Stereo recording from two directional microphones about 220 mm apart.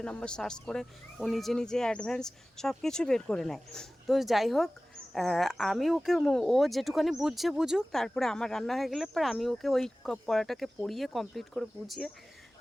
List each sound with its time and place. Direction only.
0.0 s speech: 5° left (ahead or behind)